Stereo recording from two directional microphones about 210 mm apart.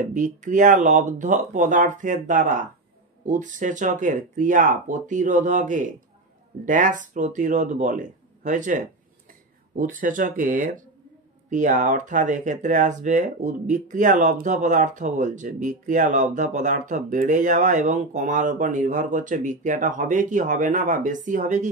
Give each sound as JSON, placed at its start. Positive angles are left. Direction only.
{"t": 0.0, "sound": "speech", "side_deg": -35}